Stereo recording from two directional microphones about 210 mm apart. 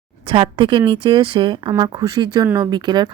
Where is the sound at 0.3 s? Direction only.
25° right (ahead or behind).